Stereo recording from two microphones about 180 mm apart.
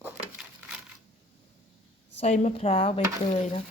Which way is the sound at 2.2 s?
40° left (ahead or behind).